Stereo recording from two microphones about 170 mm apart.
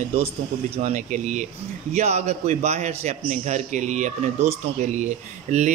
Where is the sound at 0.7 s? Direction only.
45° right (ahead or behind).